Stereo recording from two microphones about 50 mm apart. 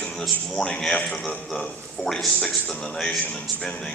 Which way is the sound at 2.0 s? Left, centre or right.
Centre.